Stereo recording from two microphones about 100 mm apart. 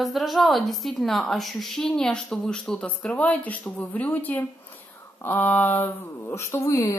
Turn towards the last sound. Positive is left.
turn(degrees=30)  # may be behind; listen again after turning